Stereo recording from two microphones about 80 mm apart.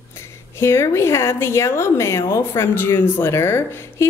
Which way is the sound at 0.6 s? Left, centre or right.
Left.